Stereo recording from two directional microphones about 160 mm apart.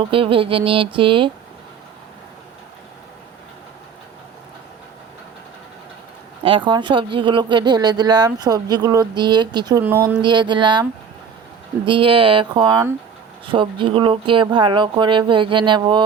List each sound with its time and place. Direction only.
0.0 s speech: 35° right (ahead or behind)
6.4 s speech: 30° right (ahead or behind)
9.8 s speech: 15° right (ahead or behind)
10.2 s speech: 30° right (ahead or behind)
11.9 s speech: 35° right (ahead or behind)